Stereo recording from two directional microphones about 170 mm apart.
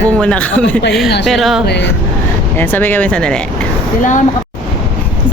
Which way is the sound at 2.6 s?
10° left (ahead or behind).